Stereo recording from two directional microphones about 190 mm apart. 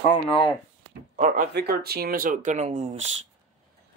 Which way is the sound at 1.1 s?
40° right (ahead or behind).